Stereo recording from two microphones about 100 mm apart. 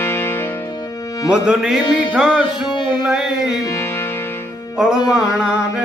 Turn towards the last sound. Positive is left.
turn(degrees=-10)  # may be behind; listen again after turning